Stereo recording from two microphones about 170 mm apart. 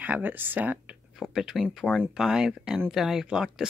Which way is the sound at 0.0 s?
10° right (ahead or behind).